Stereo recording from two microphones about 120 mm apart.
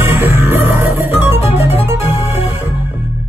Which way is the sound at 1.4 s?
60° left (ahead or behind).